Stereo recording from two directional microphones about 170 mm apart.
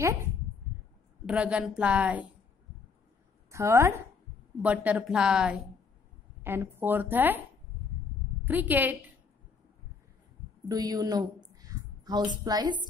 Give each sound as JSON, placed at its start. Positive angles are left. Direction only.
{"t": 1.2, "sound": "a woman's voice", "side_deg": -5}
{"t": 3.5, "sound": "a woman's voice", "side_deg": -15}
{"t": 8.5, "sound": "a woman's voice", "side_deg": -10}
{"t": 10.7, "sound": "a woman's voice", "side_deg": -20}
{"t": 12.0, "sound": "a sound", "side_deg": -25}
{"t": 12.4, "sound": "speech", "side_deg": -25}